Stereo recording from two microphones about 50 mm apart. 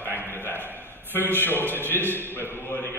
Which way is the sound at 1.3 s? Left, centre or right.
Left.